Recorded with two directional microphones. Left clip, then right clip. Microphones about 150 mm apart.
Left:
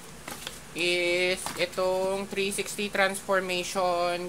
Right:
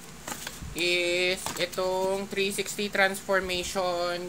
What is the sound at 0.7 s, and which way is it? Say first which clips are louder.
A woman's voice: even; 15° left (ahead or behind).